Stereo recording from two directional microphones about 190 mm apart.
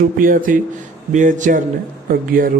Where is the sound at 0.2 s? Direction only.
45° right (ahead or behind).